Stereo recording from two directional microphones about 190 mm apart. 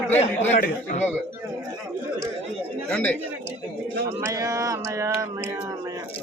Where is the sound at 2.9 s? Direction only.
10° left (ahead or behind).